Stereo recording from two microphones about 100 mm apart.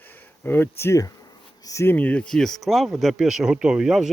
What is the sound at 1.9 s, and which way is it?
Speech, 15° left (ahead or behind).